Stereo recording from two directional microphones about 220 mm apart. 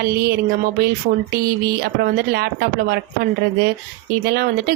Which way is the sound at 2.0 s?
45° right (ahead or behind).